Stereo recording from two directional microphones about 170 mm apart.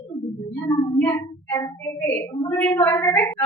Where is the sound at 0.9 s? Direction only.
10° left (ahead or behind).